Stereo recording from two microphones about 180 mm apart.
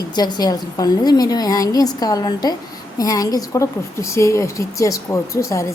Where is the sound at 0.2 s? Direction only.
20° left (ahead or behind).